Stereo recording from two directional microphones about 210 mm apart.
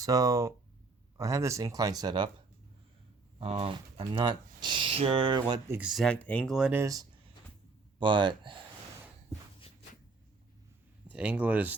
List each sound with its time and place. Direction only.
0.0 s speech: 15° right (ahead or behind)
3.3 s speech: 30° right (ahead or behind)
11.1 s speech: 5° right (ahead or behind)